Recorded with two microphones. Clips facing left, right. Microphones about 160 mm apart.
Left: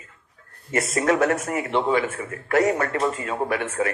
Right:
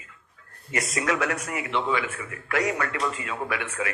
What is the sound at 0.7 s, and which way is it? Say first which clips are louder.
A man's voice: left 6 dB; 45° left (ahead or behind).